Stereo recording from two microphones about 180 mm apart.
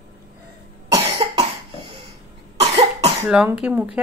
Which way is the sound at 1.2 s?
25° right (ahead or behind).